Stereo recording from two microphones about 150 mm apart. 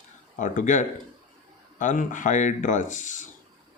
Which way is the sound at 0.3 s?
55° left (ahead or behind).